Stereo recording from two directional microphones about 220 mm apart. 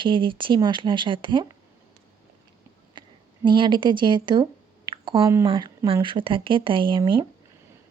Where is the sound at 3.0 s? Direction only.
20° right (ahead or behind).